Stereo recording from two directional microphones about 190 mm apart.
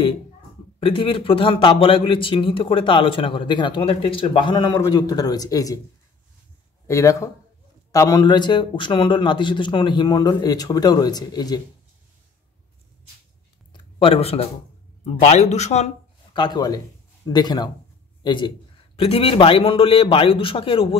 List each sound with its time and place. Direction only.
0.7 s speech: 30° left (ahead or behind)
6.9 s speech: 15° left (ahead or behind)
13.7 s a sound: 30° left (ahead or behind)
15.0 s speech: 35° left (ahead or behind)
16.3 s speech: 20° left (ahead or behind)